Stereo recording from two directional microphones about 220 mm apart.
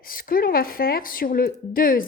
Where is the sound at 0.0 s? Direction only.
40° left (ahead or behind).